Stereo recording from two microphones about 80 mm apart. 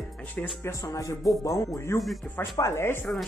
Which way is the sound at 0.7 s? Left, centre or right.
Left.